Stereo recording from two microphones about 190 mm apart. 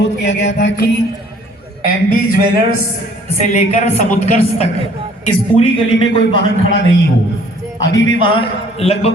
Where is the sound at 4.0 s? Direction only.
40° left (ahead or behind).